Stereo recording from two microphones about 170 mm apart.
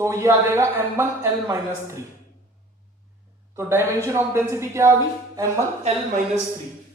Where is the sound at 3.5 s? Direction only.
15° right (ahead or behind).